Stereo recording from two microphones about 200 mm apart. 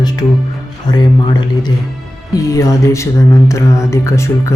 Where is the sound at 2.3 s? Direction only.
15° left (ahead or behind).